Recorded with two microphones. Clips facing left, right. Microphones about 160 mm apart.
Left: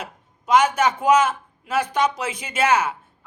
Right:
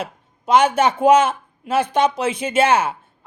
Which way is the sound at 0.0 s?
30° right (ahead or behind).